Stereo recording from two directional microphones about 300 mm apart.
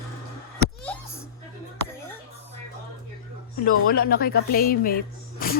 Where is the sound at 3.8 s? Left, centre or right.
Left.